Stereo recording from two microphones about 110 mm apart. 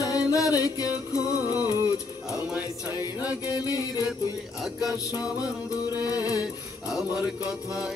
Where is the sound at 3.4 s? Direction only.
35° left (ahead or behind).